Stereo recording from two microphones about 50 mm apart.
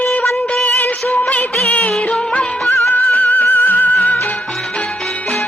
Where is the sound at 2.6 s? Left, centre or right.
Left.